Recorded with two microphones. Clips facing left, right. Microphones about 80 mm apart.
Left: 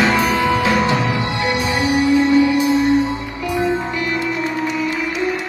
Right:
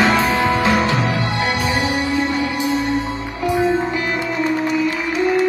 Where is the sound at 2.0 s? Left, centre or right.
Right.